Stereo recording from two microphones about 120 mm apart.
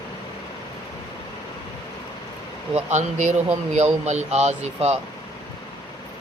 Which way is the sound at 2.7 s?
75° right (ahead or behind).